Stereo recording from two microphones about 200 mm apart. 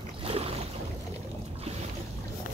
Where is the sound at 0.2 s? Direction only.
30° right (ahead or behind).